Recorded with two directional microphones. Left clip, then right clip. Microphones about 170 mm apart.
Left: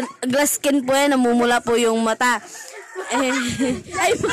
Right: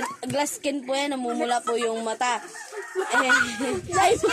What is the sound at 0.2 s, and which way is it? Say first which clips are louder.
Speech: left 10 dB; 60° left (ahead or behind).